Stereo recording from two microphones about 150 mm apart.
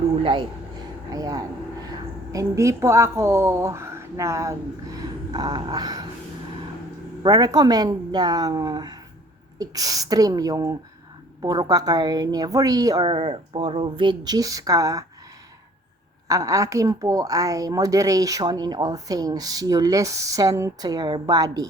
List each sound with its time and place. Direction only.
0.2 s speech: 35° right (ahead or behind)
1.1 s a woman's voice: 25° right (ahead or behind)
4.9 s a sound: 25° right (ahead or behind)
7.2 s a woman's voice: 25° right (ahead or behind)
16.3 s a woman's voice: 20° right (ahead or behind)